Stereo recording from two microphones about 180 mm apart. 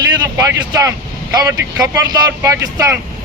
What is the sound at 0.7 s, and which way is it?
Speech, 20° right (ahead or behind).